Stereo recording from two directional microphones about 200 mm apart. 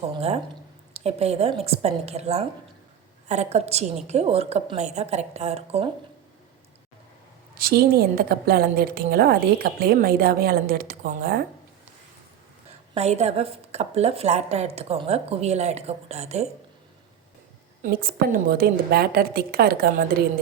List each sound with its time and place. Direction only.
0.1 s a sound: 30° right (ahead or behind)
0.9 s a woman's voice: 30° right (ahead or behind)
7.5 s a woman's voice: 50° right (ahead or behind)
12.9 s a woman's voice: 30° right (ahead or behind)
17.8 s a woman's voice: 45° right (ahead or behind)